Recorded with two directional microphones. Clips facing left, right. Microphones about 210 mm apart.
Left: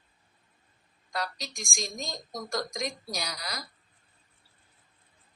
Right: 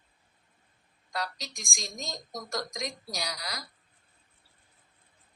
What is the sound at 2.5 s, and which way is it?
Speech, 50° left (ahead or behind).